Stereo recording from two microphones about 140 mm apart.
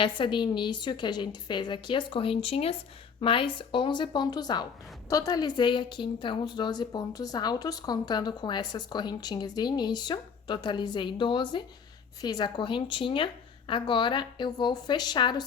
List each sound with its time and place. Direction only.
0.0 s a woman's voice: 35° left (ahead or behind)